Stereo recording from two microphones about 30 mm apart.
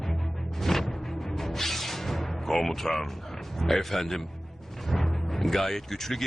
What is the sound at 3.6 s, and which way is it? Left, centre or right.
Speech, centre.